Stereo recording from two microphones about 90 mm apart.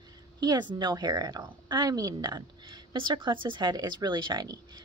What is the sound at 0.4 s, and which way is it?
A woman's voice, 50° right (ahead or behind).